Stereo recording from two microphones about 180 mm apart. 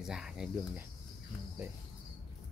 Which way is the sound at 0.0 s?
5° right (ahead or behind).